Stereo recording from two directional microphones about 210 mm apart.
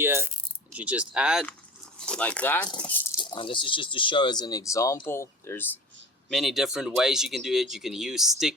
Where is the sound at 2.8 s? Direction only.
10° left (ahead or behind).